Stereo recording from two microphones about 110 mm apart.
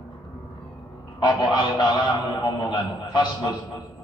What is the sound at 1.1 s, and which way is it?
A man's voice, 40° left (ahead or behind).